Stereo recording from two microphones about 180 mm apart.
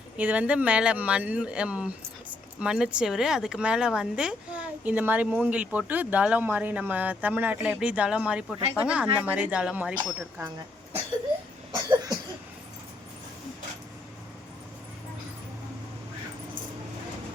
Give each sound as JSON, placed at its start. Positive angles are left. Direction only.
{"t": 0.2, "sound": "speech", "side_deg": -10}
{"t": 11.7, "sound": "cough", "side_deg": -25}